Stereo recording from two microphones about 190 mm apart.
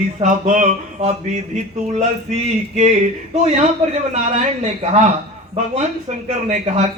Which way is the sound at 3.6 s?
35° right (ahead or behind).